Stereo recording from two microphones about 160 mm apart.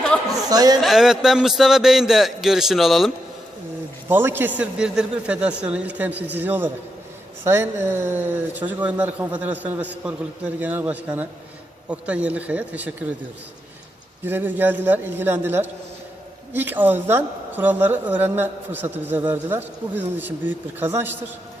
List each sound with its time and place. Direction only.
0.4 s speech: 25° right (ahead or behind)
0.8 s a man's voice: centre (ahead or behind)
4.1 s speech: 15° right (ahead or behind)
14.3 s speech: 10° right (ahead or behind)